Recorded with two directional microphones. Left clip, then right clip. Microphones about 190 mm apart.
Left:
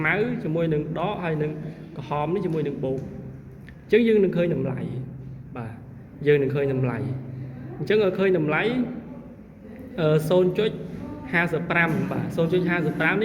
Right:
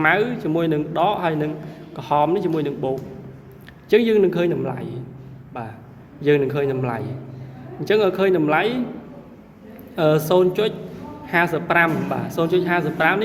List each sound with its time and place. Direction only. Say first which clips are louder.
0.0 s a woman's voice: right 6 dB; 45° right (ahead or behind)
5.6 s a sound: right 6 dB; 35° right (ahead or behind)
6.2 s a man's voice: right 2 dB; 40° right (ahead or behind)
9.9 s a woman's voice: right 4 dB; 45° right (ahead or behind)